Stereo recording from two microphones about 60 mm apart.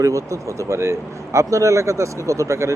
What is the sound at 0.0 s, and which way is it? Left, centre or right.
Speech, right.